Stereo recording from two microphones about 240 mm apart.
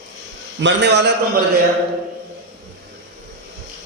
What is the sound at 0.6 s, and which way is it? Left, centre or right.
Speech, right.